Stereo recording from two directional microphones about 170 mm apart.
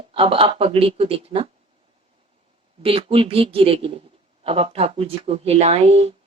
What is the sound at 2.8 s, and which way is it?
A woman's voice, 30° right (ahead or behind).